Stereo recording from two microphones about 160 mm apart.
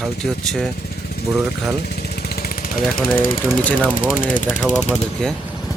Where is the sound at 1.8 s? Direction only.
85° left.